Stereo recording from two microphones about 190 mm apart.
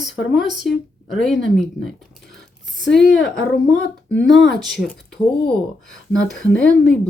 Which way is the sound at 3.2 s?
5° left (ahead or behind).